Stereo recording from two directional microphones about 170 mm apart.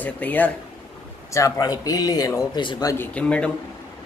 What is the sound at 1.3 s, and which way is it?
Speech, 20° left (ahead or behind).